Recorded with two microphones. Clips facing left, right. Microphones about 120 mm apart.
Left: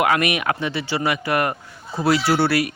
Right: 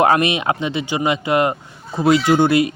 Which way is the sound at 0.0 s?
30° right (ahead or behind).